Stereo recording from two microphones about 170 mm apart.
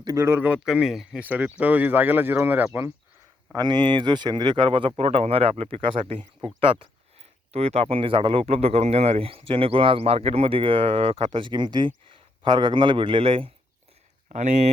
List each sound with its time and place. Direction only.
0.0 s speech: 20° right (ahead or behind)
3.5 s a man's voice: 25° right (ahead or behind)
14.3 s speech: 45° right (ahead or behind)